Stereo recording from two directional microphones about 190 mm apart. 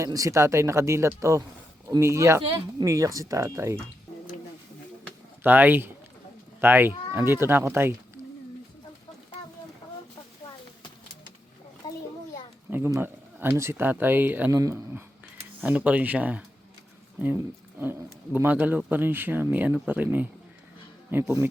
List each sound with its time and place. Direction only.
0.0 s speech: 15° right (ahead or behind)
5.4 s speech: 10° right (ahead or behind)
12.7 s speech: 10° right (ahead or behind)